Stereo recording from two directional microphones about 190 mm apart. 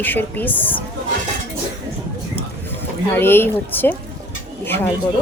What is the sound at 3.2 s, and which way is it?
Speech, 10° left (ahead or behind).